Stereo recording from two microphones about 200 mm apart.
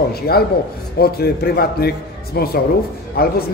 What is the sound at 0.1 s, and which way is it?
Speech, 50° left (ahead or behind).